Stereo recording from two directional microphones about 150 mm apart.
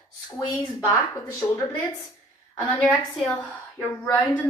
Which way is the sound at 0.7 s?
15° left (ahead or behind).